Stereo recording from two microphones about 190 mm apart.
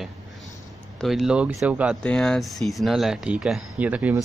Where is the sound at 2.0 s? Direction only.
5° left (ahead or behind).